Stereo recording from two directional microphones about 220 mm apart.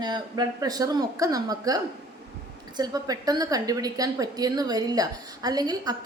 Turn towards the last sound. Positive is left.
turn(degrees=-15)  # may be behind; listen again after turning